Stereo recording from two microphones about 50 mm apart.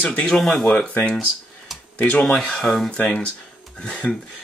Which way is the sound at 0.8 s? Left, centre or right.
Left.